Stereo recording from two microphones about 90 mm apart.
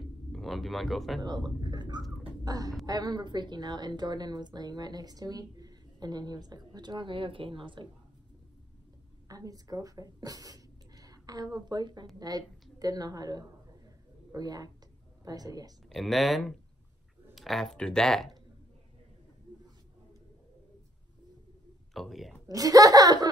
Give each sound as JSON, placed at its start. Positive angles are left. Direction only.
{"t": 0.3, "sound": "speech", "side_deg": 0}
{"t": 1.6, "sound": "a sound", "side_deg": -55}
{"t": 2.4, "sound": "a woman's voice", "side_deg": -45}
{"t": 9.3, "sound": "a woman's voice", "side_deg": -40}
{"t": 15.9, "sound": "speech", "side_deg": 0}
{"t": 21.9, "sound": "speech", "side_deg": 0}
{"t": 22.5, "sound": "a woman's voice", "side_deg": -40}